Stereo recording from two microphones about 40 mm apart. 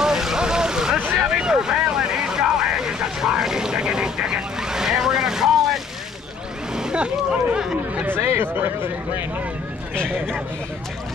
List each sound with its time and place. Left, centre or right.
0.0 s boat: centre
1.1 s vehicle: right
6.7 s a sound: centre
8.1 s speech: right